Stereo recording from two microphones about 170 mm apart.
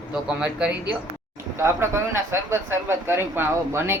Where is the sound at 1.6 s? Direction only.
15° right (ahead or behind).